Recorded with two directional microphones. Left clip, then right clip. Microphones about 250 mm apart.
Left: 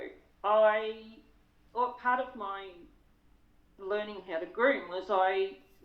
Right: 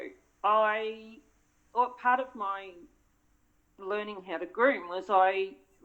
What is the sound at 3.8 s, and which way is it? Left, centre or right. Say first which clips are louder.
Speech: even; right.